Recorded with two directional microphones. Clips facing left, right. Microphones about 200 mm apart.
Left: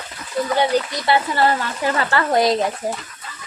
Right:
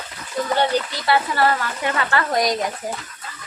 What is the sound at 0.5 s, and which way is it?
Speech, 20° left (ahead or behind).